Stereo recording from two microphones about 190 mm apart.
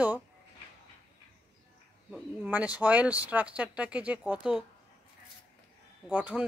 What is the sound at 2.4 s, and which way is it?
Speech, 10° right (ahead or behind).